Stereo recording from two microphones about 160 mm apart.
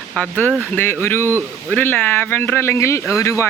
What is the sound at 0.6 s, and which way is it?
Speech, 15° left (ahead or behind).